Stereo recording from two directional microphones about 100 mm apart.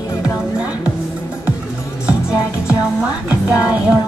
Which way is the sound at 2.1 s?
10° right (ahead or behind).